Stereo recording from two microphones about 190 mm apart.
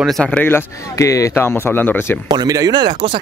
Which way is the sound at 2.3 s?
20° right (ahead or behind).